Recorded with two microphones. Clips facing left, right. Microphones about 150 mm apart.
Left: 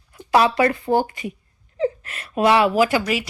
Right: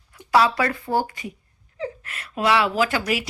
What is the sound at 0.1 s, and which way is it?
Speech, 20° left (ahead or behind).